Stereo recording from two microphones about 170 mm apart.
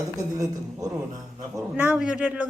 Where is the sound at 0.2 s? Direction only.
20° right (ahead or behind).